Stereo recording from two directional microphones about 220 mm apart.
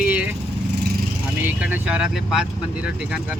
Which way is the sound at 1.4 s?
10° right (ahead or behind).